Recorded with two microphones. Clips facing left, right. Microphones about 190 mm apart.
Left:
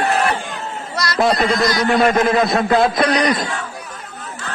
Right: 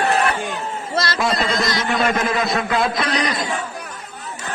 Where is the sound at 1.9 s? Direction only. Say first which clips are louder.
Left 6 dB; 50° left (ahead or behind).